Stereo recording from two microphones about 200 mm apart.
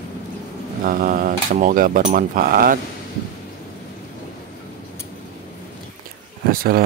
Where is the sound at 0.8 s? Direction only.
45° right (ahead or behind).